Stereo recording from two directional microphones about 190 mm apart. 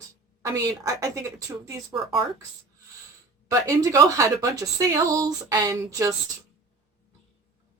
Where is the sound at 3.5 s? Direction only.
15° right (ahead or behind).